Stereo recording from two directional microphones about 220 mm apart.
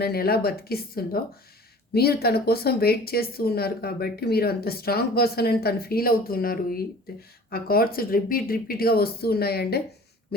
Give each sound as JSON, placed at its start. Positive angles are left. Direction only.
{"t": 0.0, "sound": "speech", "side_deg": 45}